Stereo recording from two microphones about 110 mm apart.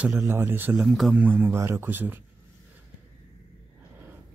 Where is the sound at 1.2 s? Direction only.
15° right (ahead or behind).